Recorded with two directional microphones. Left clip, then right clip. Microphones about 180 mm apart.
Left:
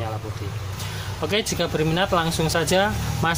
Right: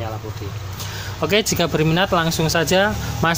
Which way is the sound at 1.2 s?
30° right (ahead or behind).